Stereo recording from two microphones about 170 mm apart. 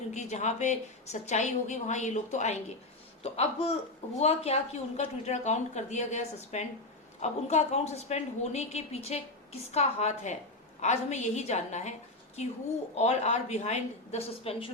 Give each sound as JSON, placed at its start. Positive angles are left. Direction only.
{"t": 0.1, "sound": "a woman's voice", "side_deg": 40}
{"t": 13.0, "sound": "a woman's voice", "side_deg": 40}